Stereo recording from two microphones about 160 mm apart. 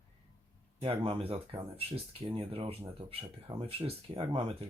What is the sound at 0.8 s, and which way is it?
Speech, 35° right (ahead or behind).